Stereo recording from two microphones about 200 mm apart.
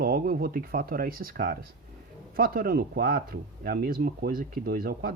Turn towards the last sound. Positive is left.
turn(degrees=-50)  # may be behind; listen again after turning